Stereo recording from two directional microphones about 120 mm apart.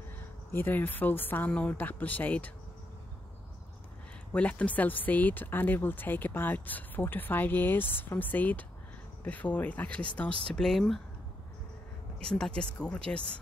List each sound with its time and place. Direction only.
0.5 s speech: 15° left (ahead or behind)
4.3 s speech: 10° left (ahead or behind)
12.3 s speech: 5° left (ahead or behind)